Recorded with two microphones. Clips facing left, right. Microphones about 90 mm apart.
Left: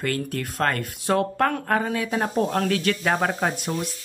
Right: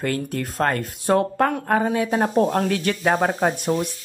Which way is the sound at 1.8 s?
30° right (ahead or behind).